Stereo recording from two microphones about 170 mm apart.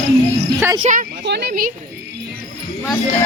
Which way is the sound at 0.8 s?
40° right (ahead or behind).